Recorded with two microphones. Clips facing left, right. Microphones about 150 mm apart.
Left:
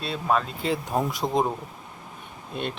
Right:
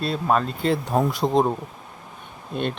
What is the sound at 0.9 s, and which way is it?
Speech, 30° right (ahead or behind).